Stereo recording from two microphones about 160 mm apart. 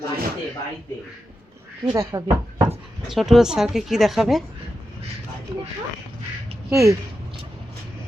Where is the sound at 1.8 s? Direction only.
25° right (ahead or behind).